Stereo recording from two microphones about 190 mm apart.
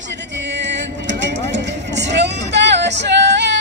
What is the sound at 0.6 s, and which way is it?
Vehicle, 70° right (ahead or behind).